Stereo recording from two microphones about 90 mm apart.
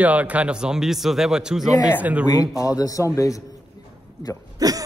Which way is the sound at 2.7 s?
40° left (ahead or behind).